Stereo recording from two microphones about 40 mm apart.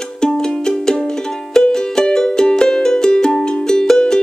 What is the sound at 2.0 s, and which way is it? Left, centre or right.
Music, centre.